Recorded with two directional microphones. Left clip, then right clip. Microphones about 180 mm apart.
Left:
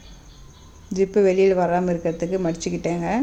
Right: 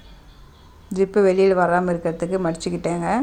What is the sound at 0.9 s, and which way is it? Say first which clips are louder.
A woman's voice: right 1 dB; 5° left (ahead or behind).